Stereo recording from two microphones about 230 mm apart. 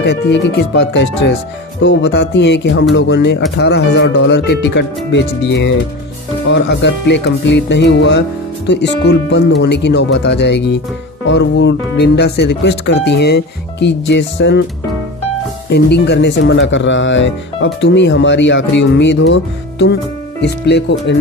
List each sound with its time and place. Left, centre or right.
0.0 s speech: left
15.7 s speech: left
20.4 s speech: left